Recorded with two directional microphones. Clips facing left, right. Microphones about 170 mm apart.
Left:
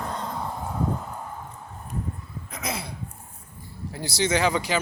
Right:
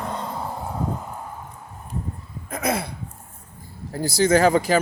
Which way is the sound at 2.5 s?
55° right (ahead or behind).